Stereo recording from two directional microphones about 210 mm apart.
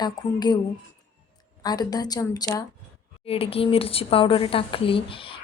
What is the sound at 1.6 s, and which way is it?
A woman's voice, 20° left (ahead or behind).